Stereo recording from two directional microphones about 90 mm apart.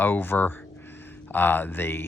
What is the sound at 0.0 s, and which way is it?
Speech, 25° left (ahead or behind).